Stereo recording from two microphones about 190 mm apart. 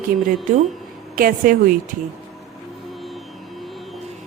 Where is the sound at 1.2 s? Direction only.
50° right (ahead or behind).